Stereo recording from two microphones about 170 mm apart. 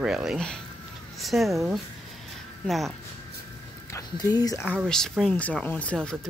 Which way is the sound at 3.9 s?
20° left (ahead or behind).